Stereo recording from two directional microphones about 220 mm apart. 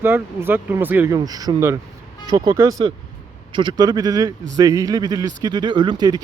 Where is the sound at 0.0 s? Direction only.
10° right (ahead or behind).